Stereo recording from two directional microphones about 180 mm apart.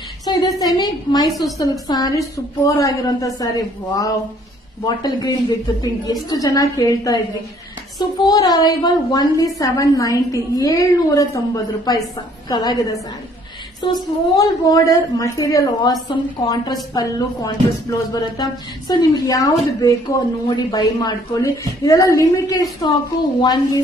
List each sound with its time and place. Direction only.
0.2 s a woman's voice: 20° left (ahead or behind)
8.2 s speech: 20° left (ahead or behind)